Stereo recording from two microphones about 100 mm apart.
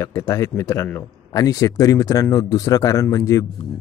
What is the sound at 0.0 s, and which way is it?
A man's voice, 30° left (ahead or behind).